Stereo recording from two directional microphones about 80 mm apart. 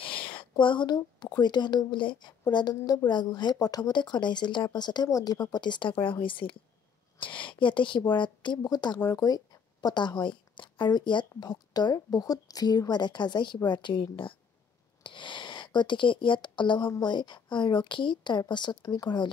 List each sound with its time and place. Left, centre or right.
0.0 s a woman's voice: left
8.1 s speech: left
8.6 s speech: left
15.0 s speech: left